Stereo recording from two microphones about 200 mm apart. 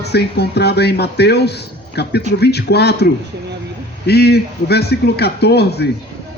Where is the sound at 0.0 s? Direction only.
55° left (ahead or behind).